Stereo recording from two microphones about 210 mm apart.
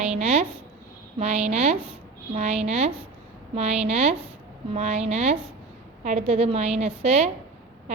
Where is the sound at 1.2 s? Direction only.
30° right (ahead or behind).